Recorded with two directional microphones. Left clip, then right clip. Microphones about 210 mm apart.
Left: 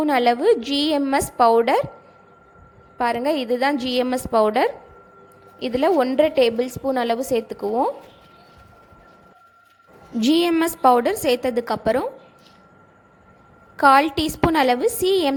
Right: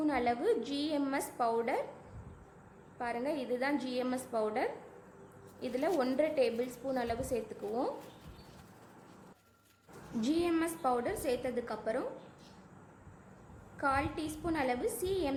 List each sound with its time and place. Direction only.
0.0 s a woman's voice: 40° left (ahead or behind)
3.0 s a woman's voice: 40° left (ahead or behind)
10.2 s a woman's voice: 40° left (ahead or behind)
13.7 s a woman's voice: 40° left (ahead or behind)